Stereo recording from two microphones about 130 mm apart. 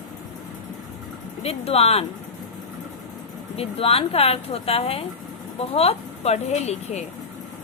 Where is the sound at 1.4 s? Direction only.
50° left (ahead or behind).